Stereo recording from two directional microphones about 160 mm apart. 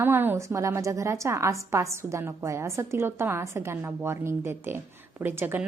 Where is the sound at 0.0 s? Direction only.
15° right (ahead or behind).